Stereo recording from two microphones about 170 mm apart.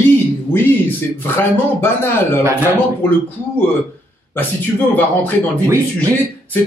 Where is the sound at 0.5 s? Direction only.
10° left (ahead or behind).